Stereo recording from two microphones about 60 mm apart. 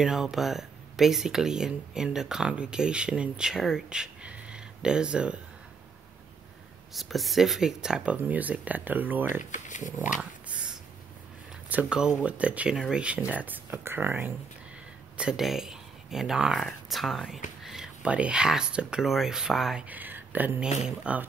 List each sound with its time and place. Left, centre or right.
0.0 s speech: centre
6.9 s speech: centre
8.1 s speech: right
10.5 s a sound: centre
11.7 s speech: right
13.7 s speech: right
15.3 s speech: centre
18.0 s speech: centre
19.0 s speech: centre
19.8 s speech: right
20.6 s speech: centre